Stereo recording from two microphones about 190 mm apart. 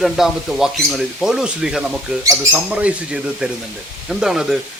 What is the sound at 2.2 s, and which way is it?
Speech, 15° right (ahead or behind).